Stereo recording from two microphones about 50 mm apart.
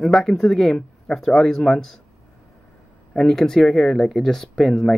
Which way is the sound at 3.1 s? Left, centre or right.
Centre.